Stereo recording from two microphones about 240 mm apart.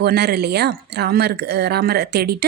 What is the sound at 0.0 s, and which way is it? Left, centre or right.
Speech, right.